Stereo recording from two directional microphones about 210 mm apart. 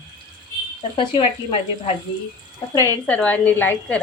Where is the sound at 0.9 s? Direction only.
25° left (ahead or behind).